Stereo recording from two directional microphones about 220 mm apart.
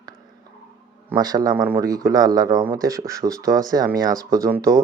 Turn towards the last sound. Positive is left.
turn(degrees=-10)  # may be behind; listen again after turning